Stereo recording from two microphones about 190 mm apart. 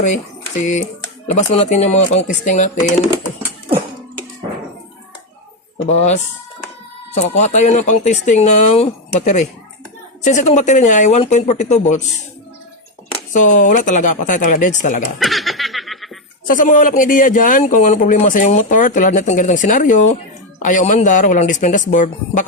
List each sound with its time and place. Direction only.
0.6 s speech: 40° left (ahead or behind)
5.9 s speech: 35° left (ahead or behind)
13.3 s speech: 40° left (ahead or behind)
15.2 s snicker: centre (ahead or behind)
16.5 s a man's voice: 45° left (ahead or behind)